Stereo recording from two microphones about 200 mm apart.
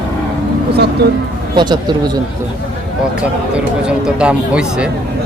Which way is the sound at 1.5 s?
20° right (ahead or behind).